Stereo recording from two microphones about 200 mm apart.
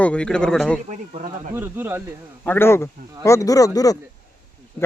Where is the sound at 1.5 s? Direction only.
10° right (ahead or behind).